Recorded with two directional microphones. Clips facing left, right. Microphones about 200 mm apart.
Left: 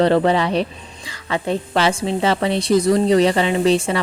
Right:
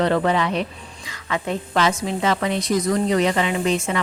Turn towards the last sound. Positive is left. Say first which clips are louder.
# left 5 dB
turn(degrees=30)  # may be behind; listen again after turning